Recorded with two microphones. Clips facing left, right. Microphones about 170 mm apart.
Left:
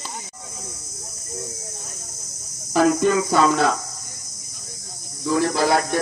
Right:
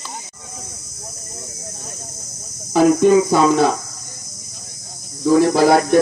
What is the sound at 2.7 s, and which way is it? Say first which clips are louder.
Speech: right 5 dB; 5° right (ahead or behind).